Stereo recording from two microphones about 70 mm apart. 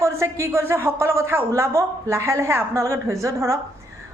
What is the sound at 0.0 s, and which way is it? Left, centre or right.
A woman's voice, right.